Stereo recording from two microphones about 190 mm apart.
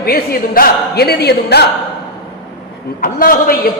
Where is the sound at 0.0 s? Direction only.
50° left (ahead or behind).